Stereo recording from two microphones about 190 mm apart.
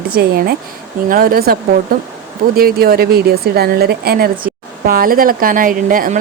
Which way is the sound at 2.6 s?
55° right (ahead or behind).